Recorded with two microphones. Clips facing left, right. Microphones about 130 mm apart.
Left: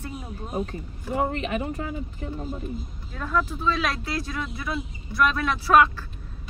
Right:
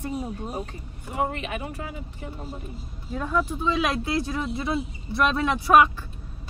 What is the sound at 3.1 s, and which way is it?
Speech, 15° right (ahead or behind).